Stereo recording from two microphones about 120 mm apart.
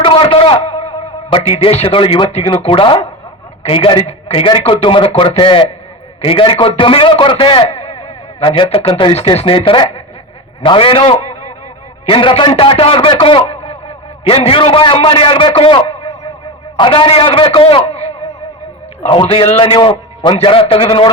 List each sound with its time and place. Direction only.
0.0 s a man's voice: 45° left (ahead or behind)
9.1 s a man's voice: 55° left (ahead or behind)
12.0 s a man's voice: 45° left (ahead or behind)
16.7 s a man's voice: 45° left (ahead or behind); by 18.1 s 60° left (ahead or behind)
19.0 s speech: 50° left (ahead or behind)